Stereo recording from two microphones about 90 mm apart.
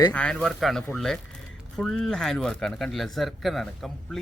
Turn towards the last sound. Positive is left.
turn(degrees=5)  # may be behind; listen again after turning